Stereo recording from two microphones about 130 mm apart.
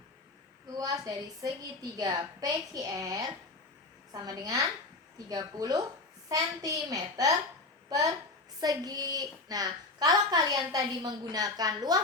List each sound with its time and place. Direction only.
0.8 s a woman's voice: 25° right (ahead or behind)